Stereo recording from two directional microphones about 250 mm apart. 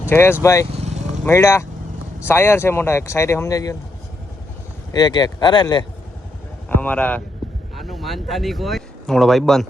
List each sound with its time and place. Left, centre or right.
0.1 s speech: centre
0.8 s vehicle: right
1.2 s speech: centre
4.9 s speech: centre
6.8 s speech: centre